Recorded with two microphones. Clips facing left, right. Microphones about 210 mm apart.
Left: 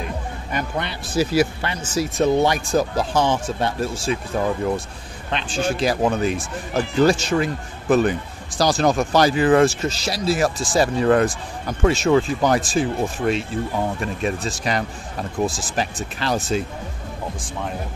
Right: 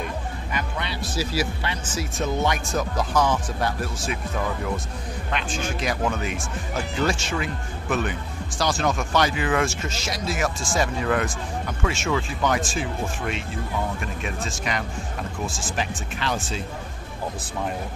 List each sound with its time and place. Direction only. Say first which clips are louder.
0.5 s speech: left 5 dB; 50° left (ahead or behind); by 4.2 s 30° left (ahead or behind)
5.3 s speech: left 6 dB; 30° left (ahead or behind)